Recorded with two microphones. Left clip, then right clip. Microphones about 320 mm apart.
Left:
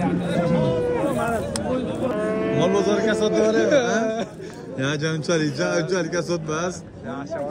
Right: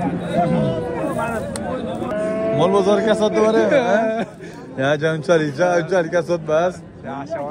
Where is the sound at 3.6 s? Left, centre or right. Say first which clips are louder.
Right 3 dB; right.